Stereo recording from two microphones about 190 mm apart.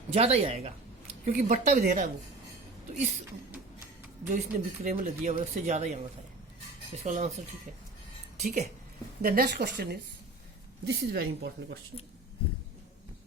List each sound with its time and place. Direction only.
0.1 s speech: 35° right (ahead or behind)
4.3 s speech: 40° right (ahead or behind)
8.4 s speech: 40° right (ahead or behind)
9.2 s speech: 55° right (ahead or behind)